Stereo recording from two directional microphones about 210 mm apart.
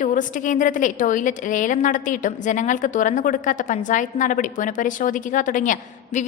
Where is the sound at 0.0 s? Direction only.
40° left (ahead or behind).